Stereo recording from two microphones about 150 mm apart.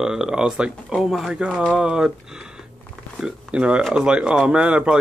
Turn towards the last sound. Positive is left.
turn(degrees=-5)  # may be behind; listen again after turning